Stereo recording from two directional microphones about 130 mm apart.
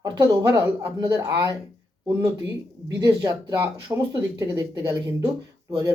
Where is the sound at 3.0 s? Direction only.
30° right (ahead or behind).